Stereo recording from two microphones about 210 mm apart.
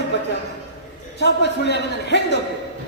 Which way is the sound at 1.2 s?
55° left (ahead or behind).